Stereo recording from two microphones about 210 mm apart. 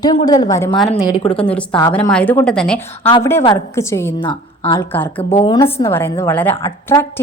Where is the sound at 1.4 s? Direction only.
5° left (ahead or behind).